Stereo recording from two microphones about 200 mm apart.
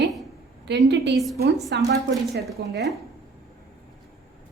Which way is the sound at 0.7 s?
60° right (ahead or behind).